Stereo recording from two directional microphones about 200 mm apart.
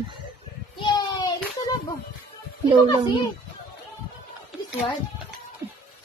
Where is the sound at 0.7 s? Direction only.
20° left (ahead or behind).